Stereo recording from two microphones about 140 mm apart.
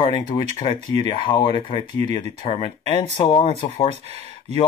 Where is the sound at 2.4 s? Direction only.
40° left (ahead or behind).